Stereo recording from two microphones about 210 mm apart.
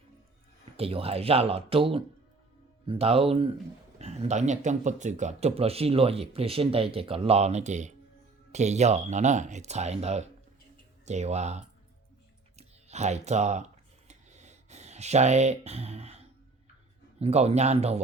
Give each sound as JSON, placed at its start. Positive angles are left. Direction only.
{"t": 0.8, "sound": "speech", "side_deg": -25}
{"t": 14.1, "sound": "a sound", "side_deg": -35}
{"t": 17.2, "sound": "speech", "side_deg": -30}